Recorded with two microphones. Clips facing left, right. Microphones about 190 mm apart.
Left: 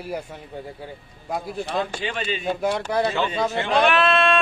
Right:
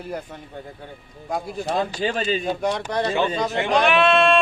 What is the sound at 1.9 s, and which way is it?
Speech, 35° right (ahead or behind).